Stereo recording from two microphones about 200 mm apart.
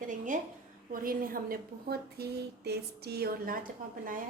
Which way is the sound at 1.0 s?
45° right (ahead or behind).